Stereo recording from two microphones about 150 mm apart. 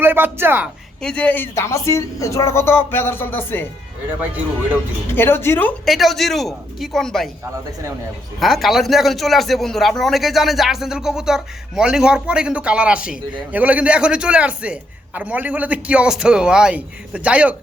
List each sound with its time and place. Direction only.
0.0 s a man's voice: 15° right (ahead or behind)
1.0 s speech: 10° left (ahead or behind)
5.1 s speech: 15° left (ahead or behind)
5.8 s speech: centre (ahead or behind)
8.4 s a man's voice: centre (ahead or behind)